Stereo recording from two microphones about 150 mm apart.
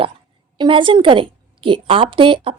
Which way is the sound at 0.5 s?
35° right (ahead or behind).